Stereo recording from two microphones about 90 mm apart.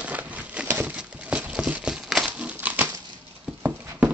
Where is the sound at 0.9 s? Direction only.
15° right (ahead or behind).